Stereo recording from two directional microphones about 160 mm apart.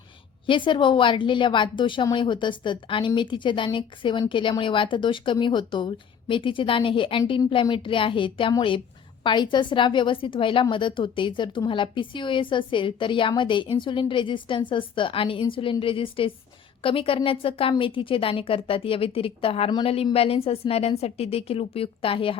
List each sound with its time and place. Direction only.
0.4 s a woman's voice: 30° left (ahead or behind)